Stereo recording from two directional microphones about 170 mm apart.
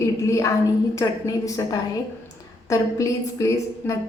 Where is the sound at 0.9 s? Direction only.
20° left (ahead or behind).